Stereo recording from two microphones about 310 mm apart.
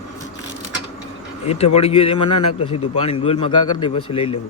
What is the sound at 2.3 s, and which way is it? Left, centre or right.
Speech, left.